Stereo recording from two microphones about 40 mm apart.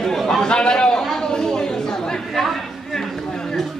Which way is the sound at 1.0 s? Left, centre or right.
Centre.